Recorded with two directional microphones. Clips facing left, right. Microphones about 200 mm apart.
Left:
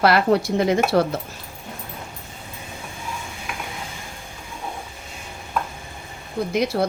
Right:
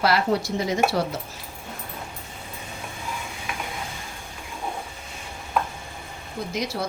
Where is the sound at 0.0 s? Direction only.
60° left (ahead or behind).